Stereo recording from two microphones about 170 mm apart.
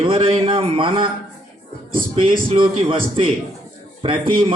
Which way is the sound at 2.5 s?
35° right (ahead or behind).